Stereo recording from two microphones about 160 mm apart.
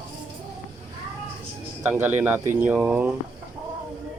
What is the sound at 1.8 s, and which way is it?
Speech, 10° right (ahead or behind).